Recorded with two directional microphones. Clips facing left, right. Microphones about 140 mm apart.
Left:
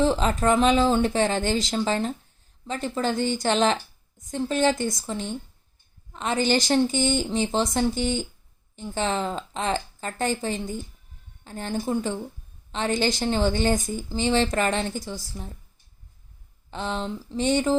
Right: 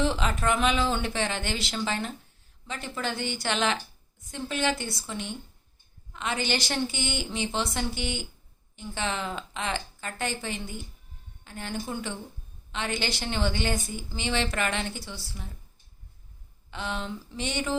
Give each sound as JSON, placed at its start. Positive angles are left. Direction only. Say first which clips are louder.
{"t": 0.0, "sound": "a woman's voice", "louder": "left 5 dB", "side_deg": 40}
{"t": 16.7, "sound": "a woman's voice", "louder": "left 4 dB", "side_deg": 35}